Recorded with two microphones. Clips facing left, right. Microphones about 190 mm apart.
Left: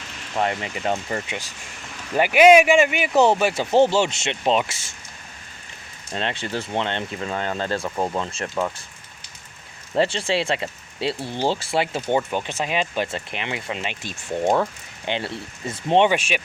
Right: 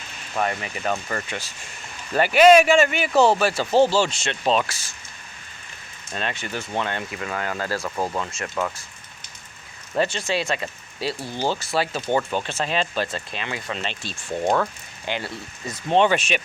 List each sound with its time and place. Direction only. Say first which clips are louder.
0.3 s speech: left 1 dB; 20° left (ahead or behind)
6.1 s speech: left 2 dB; 25° left (ahead or behind)
9.9 s speech: left 2 dB; 30° left (ahead or behind)
16.0 s speech: even; 10° left (ahead or behind)